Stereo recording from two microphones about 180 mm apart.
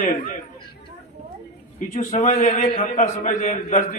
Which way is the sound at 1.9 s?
40° left (ahead or behind).